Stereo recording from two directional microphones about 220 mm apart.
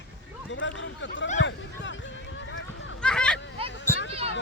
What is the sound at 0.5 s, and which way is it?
Speech, 55° left (ahead or behind).